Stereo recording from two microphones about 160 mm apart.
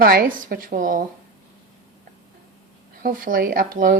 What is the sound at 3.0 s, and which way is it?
Speech, 60° right (ahead or behind).